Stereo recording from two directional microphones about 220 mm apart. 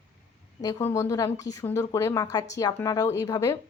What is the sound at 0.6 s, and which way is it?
Speech, 15° left (ahead or behind).